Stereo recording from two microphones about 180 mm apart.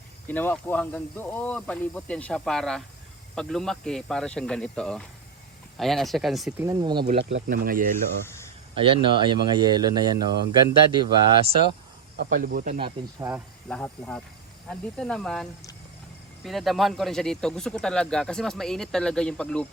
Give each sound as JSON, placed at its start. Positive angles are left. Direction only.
{"t": 0.3, "sound": "speech", "side_deg": 10}
{"t": 6.6, "sound": "speech", "side_deg": -20}
{"t": 7.2, "sound": "speech", "side_deg": -80}
{"t": 7.4, "sound": "speech", "side_deg": -55}
{"t": 8.7, "sound": "speech", "side_deg": -30}
{"t": 12.1, "sound": "speech", "side_deg": -55}
{"t": 12.8, "sound": "speech", "side_deg": -20}
{"t": 13.7, "sound": "speech", "side_deg": 5}